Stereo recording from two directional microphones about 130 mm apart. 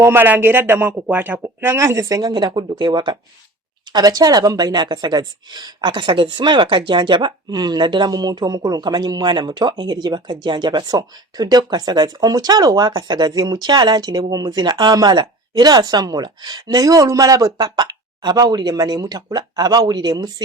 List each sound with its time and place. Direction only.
0.0 s speech: 15° right (ahead or behind)